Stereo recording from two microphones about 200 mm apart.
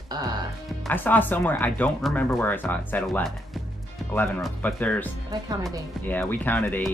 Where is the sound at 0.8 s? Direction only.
10° left (ahead or behind).